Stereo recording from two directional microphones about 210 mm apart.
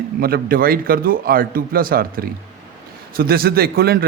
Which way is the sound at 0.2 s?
45° right (ahead or behind).